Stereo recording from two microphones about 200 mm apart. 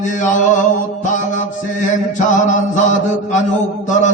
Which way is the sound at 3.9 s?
35° left (ahead or behind).